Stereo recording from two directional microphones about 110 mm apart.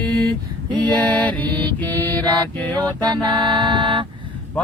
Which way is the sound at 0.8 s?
15° left (ahead or behind).